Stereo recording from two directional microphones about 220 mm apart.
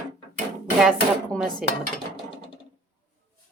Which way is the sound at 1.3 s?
Centre (ahead or behind).